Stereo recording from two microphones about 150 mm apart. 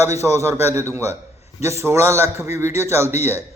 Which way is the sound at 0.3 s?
15° right (ahead or behind).